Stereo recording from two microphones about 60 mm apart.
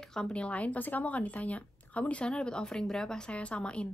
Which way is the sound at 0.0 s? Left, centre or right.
Centre.